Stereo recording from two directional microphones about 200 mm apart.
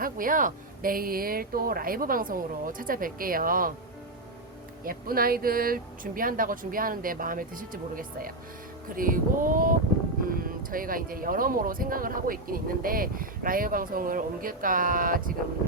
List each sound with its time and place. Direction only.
0.0 s speech: 45° right (ahead or behind)
4.8 s speech: 45° right (ahead or behind)